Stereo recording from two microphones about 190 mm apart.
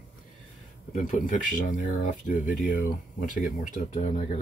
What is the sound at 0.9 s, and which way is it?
Speech, 40° left (ahead or behind).